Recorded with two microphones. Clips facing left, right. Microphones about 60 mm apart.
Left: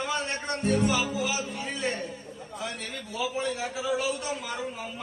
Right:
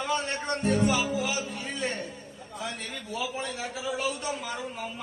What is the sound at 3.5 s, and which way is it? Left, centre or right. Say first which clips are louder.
Speech: left 3 dB; left.